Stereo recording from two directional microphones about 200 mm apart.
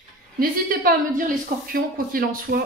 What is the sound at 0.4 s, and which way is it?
Speech, 45° right (ahead or behind).